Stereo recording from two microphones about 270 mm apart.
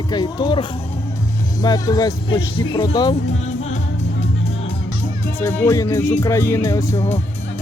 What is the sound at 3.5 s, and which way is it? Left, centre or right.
Music, left.